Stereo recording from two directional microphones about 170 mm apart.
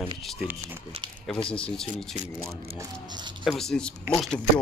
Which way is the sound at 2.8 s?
25° right (ahead or behind).